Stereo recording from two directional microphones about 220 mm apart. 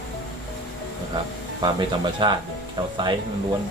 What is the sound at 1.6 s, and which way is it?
Speech, 20° right (ahead or behind).